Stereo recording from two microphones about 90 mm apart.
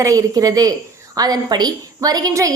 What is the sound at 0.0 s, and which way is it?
A woman's voice, 40° right (ahead or behind).